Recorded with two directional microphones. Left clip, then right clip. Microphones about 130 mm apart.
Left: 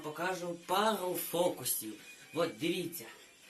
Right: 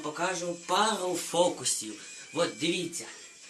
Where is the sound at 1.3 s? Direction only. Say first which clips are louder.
Right 6 dB; 15° left (ahead or behind).